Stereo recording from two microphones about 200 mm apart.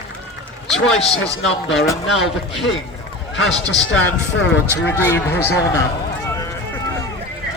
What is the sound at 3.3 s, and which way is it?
Speech, 60° left (ahead or behind).